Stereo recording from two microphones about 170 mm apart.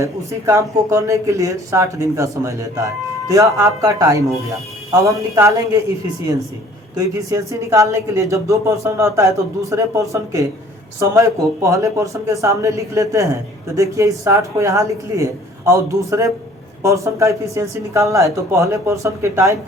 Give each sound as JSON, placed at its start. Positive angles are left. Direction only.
{"t": 0.0, "sound": "speech", "side_deg": -15}
{"t": 6.9, "sound": "speech", "side_deg": -20}